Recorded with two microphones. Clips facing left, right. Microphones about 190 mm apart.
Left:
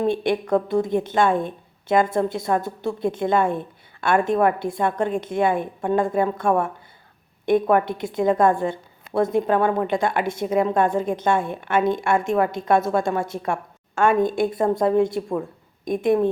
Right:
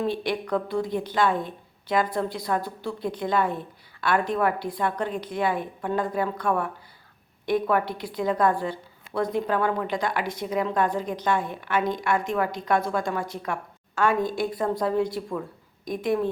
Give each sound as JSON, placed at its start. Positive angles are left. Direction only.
{"t": 0.1, "sound": "a woman's voice", "side_deg": 25}
{"t": 1.3, "sound": "a woman's voice", "side_deg": 50}
{"t": 1.9, "sound": "a woman's voice", "side_deg": 25}
{"t": 4.9, "sound": "a woman's voice", "side_deg": 50}
{"t": 5.3, "sound": "a woman's voice", "side_deg": 25}